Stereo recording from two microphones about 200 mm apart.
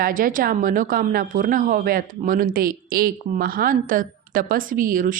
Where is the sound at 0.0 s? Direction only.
45° right (ahead or behind).